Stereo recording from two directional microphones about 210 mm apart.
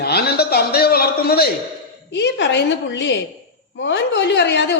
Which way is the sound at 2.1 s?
55° left (ahead or behind).